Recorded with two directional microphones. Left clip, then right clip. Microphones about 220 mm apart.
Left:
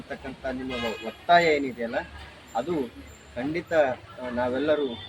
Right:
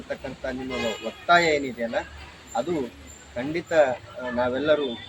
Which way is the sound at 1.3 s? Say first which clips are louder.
Even; 15° right (ahead or behind).